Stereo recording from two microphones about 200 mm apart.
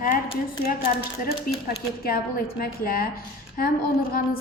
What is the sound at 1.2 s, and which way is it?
A woman's voice, 50° left (ahead or behind).